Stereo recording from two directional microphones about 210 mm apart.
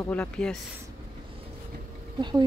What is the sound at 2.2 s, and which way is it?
Speech, 20° right (ahead or behind).